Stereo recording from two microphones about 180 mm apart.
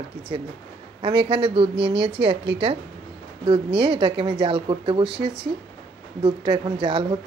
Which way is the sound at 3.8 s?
30° right (ahead or behind).